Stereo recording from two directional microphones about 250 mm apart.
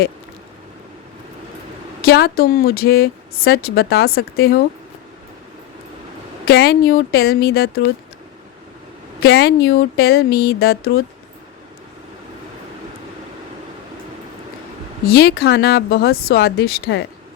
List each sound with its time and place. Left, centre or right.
2.0 s a woman's voice: left
6.4 s a woman's voice: left
9.2 s a woman's voice: left
15.0 s a woman's voice: left